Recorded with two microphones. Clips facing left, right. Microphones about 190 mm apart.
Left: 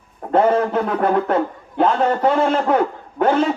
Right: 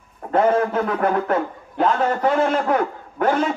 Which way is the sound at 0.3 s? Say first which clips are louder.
Left 2 dB; 30° left (ahead or behind).